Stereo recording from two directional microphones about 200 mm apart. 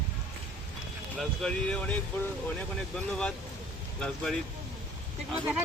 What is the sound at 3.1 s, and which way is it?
Speech, 5° left (ahead or behind).